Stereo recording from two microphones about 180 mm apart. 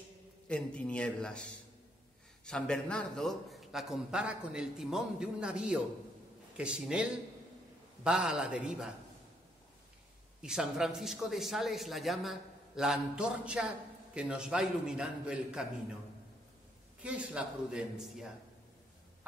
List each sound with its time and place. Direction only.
0.5 s speech: 5° left (ahead or behind)
10.4 s speech: 5° right (ahead or behind)
17.0 s speech: 5° right (ahead or behind)